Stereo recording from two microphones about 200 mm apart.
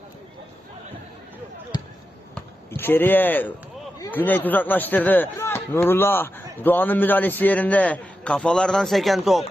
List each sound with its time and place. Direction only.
1.7 s basketball bounce: 20° left (ahead or behind)
4.0 s speech: 10° left (ahead or behind)